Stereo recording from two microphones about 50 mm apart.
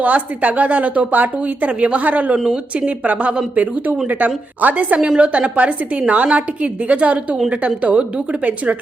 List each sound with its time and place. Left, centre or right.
0.0 s a woman's voice: right
2.3 s a woman's voice: centre
2.7 s a woman's voice: right
4.9 s a woman's voice: centre